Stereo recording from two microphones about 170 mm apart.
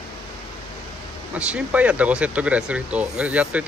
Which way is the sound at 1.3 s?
5° right (ahead or behind).